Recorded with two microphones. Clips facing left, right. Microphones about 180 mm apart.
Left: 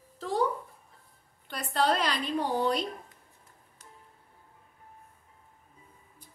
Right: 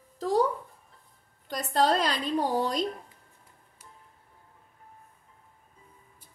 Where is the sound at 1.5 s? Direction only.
40° right (ahead or behind).